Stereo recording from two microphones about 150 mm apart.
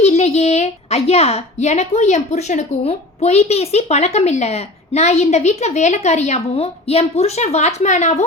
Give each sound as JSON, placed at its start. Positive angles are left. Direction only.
{"t": 0.0, "sound": "a woman's voice", "side_deg": 45}